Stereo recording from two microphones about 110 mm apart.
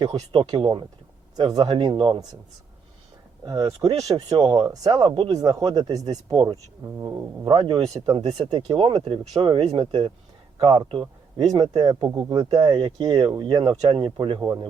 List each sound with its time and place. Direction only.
0.0 s speech: 40° right (ahead or behind)
3.4 s speech: 35° right (ahead or behind)
5.3 s speech: 35° right (ahead or behind)
7.5 s speech: 40° right (ahead or behind)
9.6 s speech: 60° right (ahead or behind)
10.6 s speech: 40° right (ahead or behind)